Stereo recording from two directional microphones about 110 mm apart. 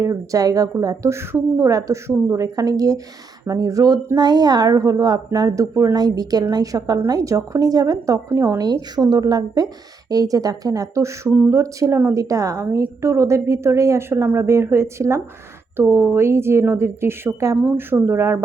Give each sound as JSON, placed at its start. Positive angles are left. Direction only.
{"t": 0.0, "sound": "a woman's voice", "side_deg": -30}
{"t": 8.3, "sound": "a woman's voice", "side_deg": -20}
{"t": 8.5, "sound": "a woman's voice", "side_deg": -35}